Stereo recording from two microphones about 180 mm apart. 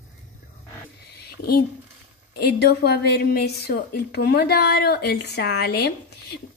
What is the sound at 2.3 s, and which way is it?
A woman's voice, 65° left (ahead or behind).